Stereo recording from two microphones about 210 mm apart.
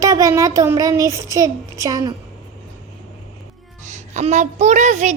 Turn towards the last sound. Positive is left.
turn(degrees=-35)  # may be behind; listen again after turning